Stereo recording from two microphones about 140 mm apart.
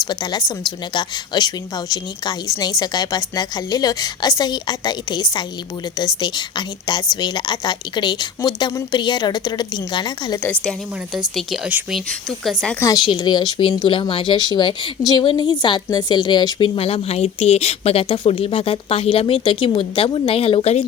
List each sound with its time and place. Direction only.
0.1 s a woman's voice: 30° left (ahead or behind)
7.2 s speech: 30° left (ahead or behind)
10.4 s a woman's voice: 10° left (ahead or behind)
11.1 s speech: 5° right (ahead or behind)
13.1 s speech: 30° left (ahead or behind); by 20.8 s 45° left (ahead or behind)